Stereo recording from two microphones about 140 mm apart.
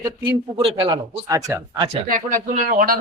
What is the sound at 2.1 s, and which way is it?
Speech, 70° right (ahead or behind).